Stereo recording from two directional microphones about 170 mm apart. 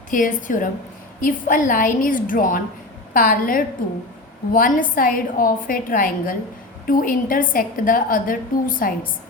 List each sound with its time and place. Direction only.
0.1 s a woman's voice: 50° left (ahead or behind)